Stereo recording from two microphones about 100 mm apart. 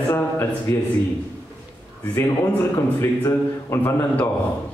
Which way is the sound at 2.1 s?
20° left (ahead or behind).